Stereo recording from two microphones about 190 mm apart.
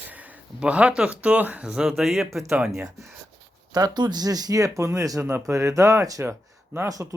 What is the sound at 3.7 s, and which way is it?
Speech, 20° right (ahead or behind).